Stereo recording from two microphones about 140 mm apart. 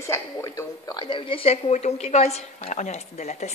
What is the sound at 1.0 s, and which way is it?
A woman's voice, 40° left (ahead or behind).